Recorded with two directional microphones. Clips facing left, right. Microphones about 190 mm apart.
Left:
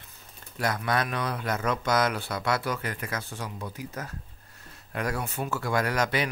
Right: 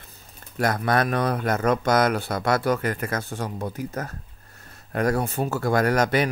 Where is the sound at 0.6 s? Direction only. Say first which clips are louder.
Right 5 dB; 50° right (ahead or behind).